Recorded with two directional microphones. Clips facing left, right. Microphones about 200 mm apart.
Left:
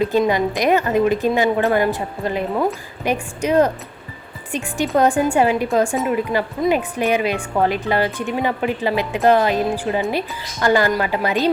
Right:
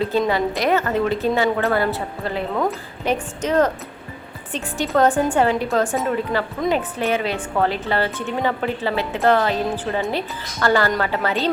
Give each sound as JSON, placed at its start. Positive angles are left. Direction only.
{"t": 0.0, "sound": "speech", "side_deg": 15}
{"t": 4.9, "sound": "speech", "side_deg": 10}